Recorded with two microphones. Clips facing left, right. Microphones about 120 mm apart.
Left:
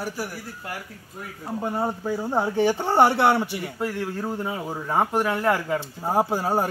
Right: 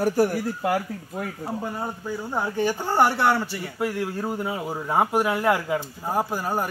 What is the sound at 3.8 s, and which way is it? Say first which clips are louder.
Speech: right 2 dB; 10° right (ahead or behind).